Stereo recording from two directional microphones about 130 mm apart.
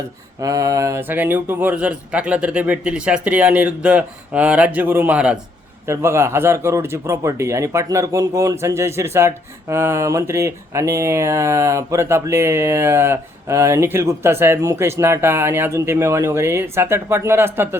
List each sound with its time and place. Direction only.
0.4 s speech: 30° right (ahead or behind); by 5.4 s 10° right (ahead or behind)
5.9 s speech: 20° right (ahead or behind)